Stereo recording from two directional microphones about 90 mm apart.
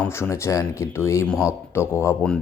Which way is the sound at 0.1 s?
30° left (ahead or behind).